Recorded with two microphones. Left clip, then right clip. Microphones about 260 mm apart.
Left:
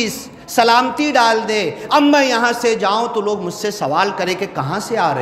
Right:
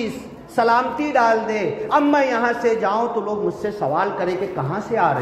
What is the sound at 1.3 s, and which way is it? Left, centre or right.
Speech, left.